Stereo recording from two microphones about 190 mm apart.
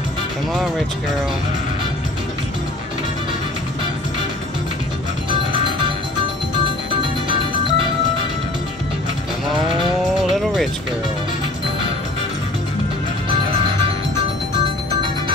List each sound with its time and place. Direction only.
5.3 s music: 25° right (ahead or behind)
14.1 s music: 25° right (ahead or behind)